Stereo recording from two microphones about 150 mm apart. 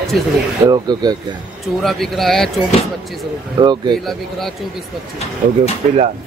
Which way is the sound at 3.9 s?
Centre (ahead or behind).